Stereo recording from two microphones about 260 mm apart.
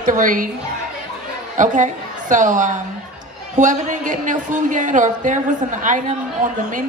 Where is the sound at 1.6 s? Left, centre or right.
Right.